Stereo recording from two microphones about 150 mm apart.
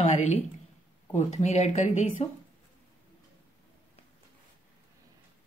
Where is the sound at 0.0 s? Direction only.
50° left (ahead or behind).